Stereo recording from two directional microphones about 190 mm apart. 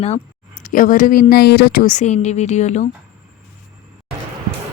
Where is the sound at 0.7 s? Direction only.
45° left (ahead or behind).